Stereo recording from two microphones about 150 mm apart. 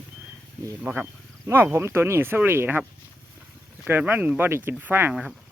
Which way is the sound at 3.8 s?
10° right (ahead or behind).